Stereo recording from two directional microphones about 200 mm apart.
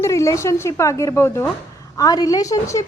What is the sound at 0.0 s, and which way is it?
A woman's voice, 15° left (ahead or behind).